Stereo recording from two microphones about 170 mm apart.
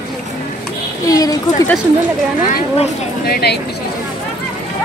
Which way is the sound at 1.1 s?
20° left (ahead or behind).